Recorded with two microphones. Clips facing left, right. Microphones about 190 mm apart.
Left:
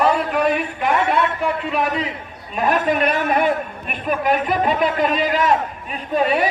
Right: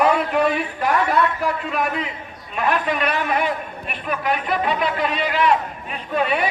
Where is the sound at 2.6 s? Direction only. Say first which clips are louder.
Left 3 dB; 45° left (ahead or behind).